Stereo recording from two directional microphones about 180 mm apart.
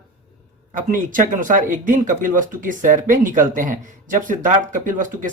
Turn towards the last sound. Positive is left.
turn(degrees=-45)  # may be behind; listen again after turning